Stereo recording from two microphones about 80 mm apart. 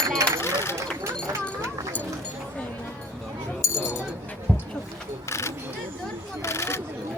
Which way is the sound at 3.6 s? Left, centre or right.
Left.